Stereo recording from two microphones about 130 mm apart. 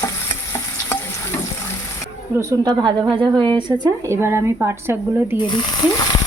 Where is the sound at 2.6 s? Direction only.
30° right (ahead or behind).